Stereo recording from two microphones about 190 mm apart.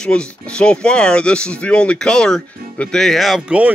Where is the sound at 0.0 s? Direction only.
5° left (ahead or behind).